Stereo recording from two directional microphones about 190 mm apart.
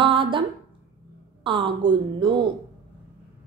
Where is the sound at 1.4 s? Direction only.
25° right (ahead or behind).